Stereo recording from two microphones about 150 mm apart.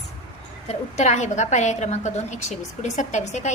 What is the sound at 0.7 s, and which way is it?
A woman's voice, 50° left (ahead or behind).